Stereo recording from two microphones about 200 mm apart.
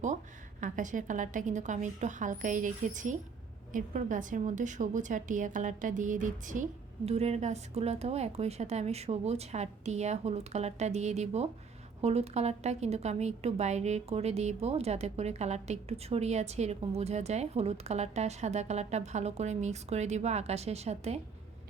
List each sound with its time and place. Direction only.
0.6 s a woman's voice: 40° right (ahead or behind)